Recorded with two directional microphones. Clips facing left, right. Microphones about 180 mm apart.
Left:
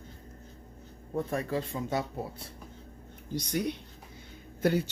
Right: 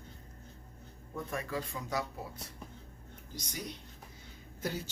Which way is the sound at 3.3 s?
65° left (ahead or behind).